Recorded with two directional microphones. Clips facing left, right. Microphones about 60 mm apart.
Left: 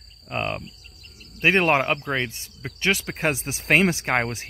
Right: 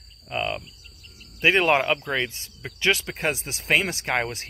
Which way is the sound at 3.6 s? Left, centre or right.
Left.